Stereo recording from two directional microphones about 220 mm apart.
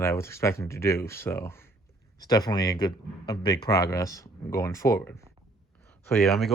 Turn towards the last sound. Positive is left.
turn(degrees=0)  # may be behind; listen again after turning